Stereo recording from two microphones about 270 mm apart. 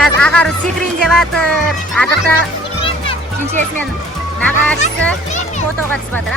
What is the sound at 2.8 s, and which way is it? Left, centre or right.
Children playing, centre.